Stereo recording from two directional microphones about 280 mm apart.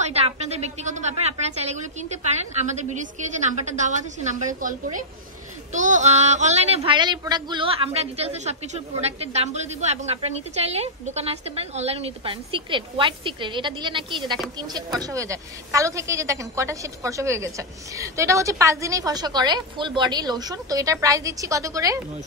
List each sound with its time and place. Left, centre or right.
0.0 s a woman's voice: right